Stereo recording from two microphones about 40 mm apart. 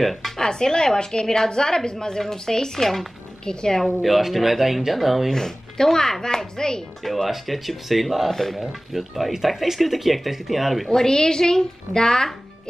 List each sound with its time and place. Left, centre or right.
0.0 s speech: centre
0.4 s speech: centre
4.0 s speech: centre
5.3 s speech: centre
7.2 s speech: centre
8.5 s speech: centre
11.0 s speech: centre